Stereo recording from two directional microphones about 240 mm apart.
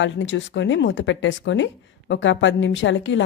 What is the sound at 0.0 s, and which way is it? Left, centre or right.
Speech, left.